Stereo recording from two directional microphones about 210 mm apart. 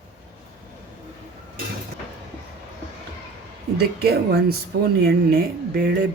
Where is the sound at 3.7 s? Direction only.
50° right (ahead or behind).